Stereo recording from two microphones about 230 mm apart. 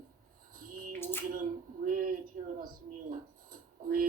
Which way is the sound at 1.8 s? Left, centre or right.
Right.